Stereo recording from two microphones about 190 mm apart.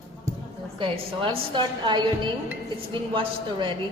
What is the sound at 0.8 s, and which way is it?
A woman's voice, 30° right (ahead or behind).